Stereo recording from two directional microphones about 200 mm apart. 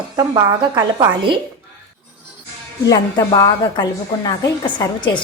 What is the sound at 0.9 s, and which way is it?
Speech, 25° right (ahead or behind).